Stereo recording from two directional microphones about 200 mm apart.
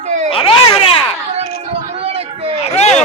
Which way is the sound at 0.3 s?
25° left (ahead or behind).